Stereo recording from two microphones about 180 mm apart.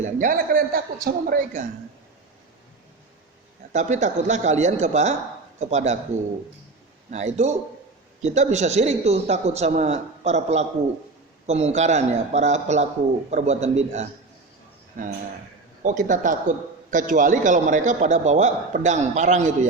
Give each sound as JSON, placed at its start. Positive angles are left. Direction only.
{"t": 0.0, "sound": "a man's voice", "side_deg": -50}
{"t": 3.7, "sound": "a man's voice", "side_deg": -40}
{"t": 7.1, "sound": "a man's voice", "side_deg": -40}